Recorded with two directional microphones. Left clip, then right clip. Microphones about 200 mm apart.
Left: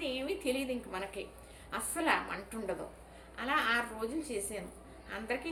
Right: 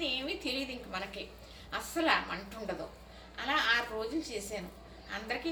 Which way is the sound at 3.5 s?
35° left (ahead or behind).